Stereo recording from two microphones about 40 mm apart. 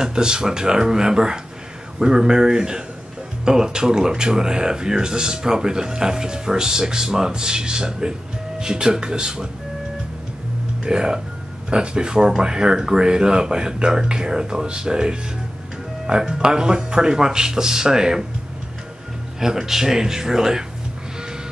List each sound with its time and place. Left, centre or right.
0.0 s speech: centre
10.8 s speech: right
19.4 s speech: centre